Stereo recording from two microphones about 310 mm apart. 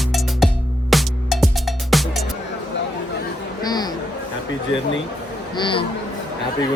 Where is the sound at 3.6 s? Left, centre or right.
Centre.